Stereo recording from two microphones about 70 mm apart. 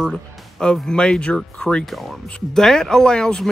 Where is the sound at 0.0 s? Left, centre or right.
Centre.